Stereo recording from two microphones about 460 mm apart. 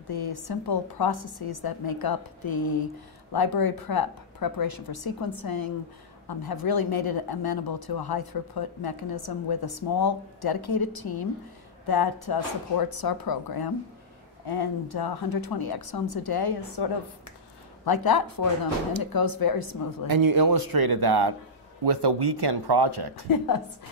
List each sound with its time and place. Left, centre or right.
0.1 s speech: left
17.8 s speech: left
20.1 s speech: right
23.2 s speech: left